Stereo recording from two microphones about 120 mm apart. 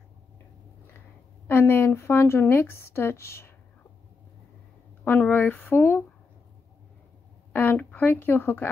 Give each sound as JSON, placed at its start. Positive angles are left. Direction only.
{"t": 1.5, "sound": "a woman's voice", "side_deg": 20}
{"t": 5.0, "sound": "speech", "side_deg": 15}
{"t": 7.5, "sound": "speech", "side_deg": 15}